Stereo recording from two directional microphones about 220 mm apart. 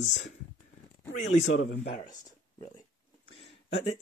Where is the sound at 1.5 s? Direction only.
50° left (ahead or behind).